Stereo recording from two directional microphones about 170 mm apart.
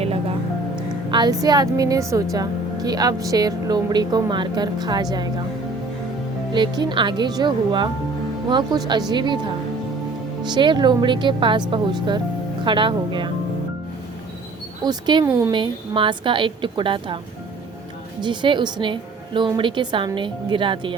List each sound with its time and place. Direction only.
1.1 s a woman's voice: 25° right (ahead or behind)
6.5 s a woman's voice: 25° right (ahead or behind)
14.8 s a woman's voice: 25° right (ahead or behind)
18.2 s a woman's voice: 25° right (ahead or behind)